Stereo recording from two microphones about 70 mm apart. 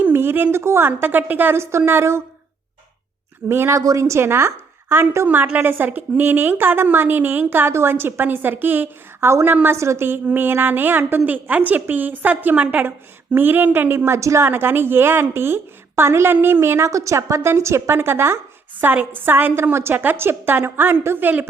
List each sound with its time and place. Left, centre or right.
0.0 s a woman's voice: right
3.5 s a woman's voice: right
3.8 s a woman's voice: right